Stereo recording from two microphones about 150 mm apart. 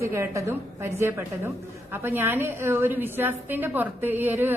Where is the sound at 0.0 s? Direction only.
20° right (ahead or behind).